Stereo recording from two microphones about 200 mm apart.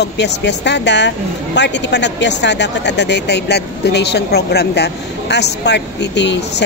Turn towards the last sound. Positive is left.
turn(degrees=60)  # may be behind; listen again after turning